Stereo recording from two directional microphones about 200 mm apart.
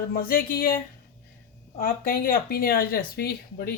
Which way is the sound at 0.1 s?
45° left (ahead or behind).